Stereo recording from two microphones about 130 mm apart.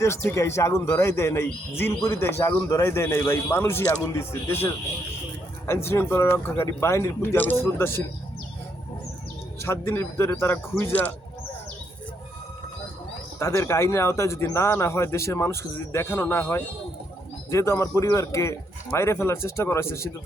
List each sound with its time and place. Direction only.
0.2 s speech: 20° left (ahead or behind)
9.6 s speech: 20° left (ahead or behind)
13.4 s speech: 25° left (ahead or behind)